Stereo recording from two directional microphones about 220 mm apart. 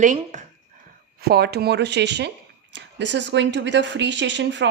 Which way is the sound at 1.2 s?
45° right (ahead or behind).